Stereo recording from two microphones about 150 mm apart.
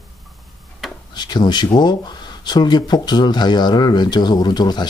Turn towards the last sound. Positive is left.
turn(degrees=30)  # may be behind; listen again after turning